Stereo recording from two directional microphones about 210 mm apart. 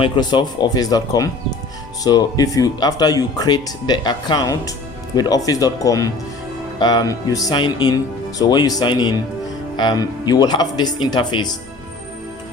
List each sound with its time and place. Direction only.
0.0 s speech: 20° left (ahead or behind)